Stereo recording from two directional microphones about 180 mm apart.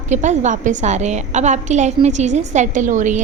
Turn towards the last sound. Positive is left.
turn(degrees=-45)  # may be behind; listen again after turning